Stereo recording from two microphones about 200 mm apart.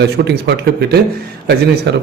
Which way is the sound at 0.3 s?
55° right (ahead or behind).